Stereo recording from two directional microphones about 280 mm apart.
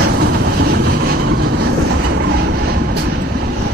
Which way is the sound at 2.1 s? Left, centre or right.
Right.